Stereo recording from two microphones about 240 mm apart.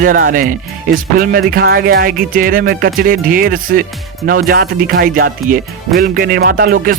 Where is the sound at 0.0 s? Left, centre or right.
Right.